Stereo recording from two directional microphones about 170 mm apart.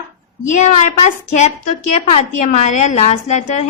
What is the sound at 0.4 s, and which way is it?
Speech, 45° left (ahead or behind).